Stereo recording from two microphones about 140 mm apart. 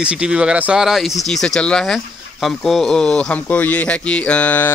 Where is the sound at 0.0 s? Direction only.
5° right (ahead or behind).